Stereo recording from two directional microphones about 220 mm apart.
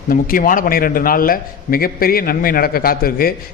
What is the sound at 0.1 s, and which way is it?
A man's voice, 40° left (ahead or behind).